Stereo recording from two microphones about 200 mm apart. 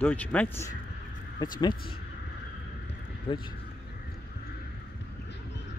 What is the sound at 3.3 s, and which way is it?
Speech, 25° left (ahead or behind).